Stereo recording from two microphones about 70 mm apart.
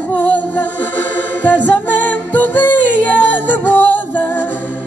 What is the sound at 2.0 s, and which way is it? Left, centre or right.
Music, left.